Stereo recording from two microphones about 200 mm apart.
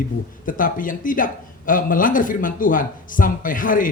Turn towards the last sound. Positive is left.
turn(degrees=45)  # may be behind; listen again after turning